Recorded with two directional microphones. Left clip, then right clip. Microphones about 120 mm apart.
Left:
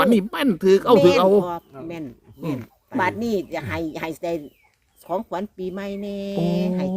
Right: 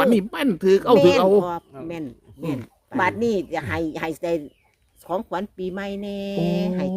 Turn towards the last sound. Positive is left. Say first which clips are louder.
# even
turn(degrees=-30)  # may be behind; listen again after turning